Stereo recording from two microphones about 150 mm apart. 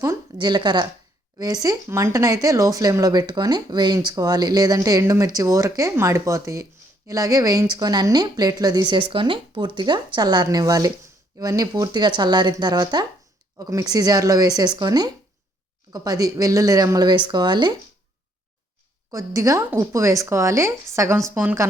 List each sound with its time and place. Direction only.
0.0 s a woman's voice: 25° right (ahead or behind)
19.1 s a woman's voice: 20° right (ahead or behind)